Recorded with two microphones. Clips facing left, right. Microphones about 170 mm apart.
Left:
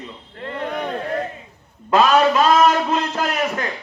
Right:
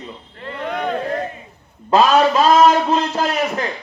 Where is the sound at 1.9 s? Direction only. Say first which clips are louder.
Right 1 dB; 35° right (ahead or behind).